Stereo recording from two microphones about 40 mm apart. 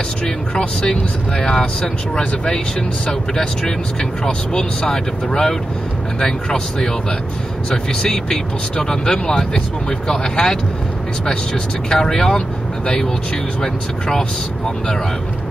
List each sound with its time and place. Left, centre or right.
1.4 s speech: left
11.9 s speech: centre